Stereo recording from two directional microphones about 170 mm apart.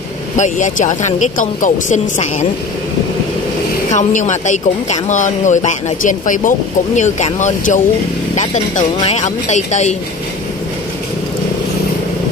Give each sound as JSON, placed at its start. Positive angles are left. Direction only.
{"t": 0.4, "sound": "speech", "side_deg": 45}
{"t": 3.9, "sound": "speech", "side_deg": 45}